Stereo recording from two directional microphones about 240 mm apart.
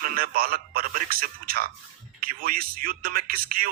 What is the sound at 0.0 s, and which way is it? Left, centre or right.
A man's voice, right.